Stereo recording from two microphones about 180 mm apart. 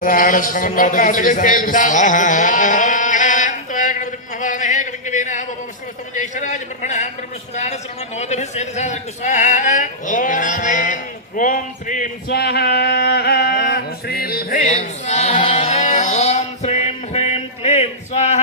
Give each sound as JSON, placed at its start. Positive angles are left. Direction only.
{"t": 0.0, "sound": "a sound", "side_deg": 50}
{"t": 6.1, "sound": "a man's voice", "side_deg": 45}
{"t": 12.3, "sound": "singing", "side_deg": 65}